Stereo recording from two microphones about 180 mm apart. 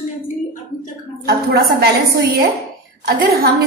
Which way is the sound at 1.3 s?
60° right (ahead or behind).